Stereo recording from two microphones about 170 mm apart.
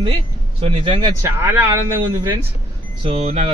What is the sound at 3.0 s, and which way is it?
Speech, 40° right (ahead or behind).